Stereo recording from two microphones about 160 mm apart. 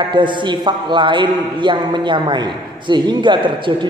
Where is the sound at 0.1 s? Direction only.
30° right (ahead or behind).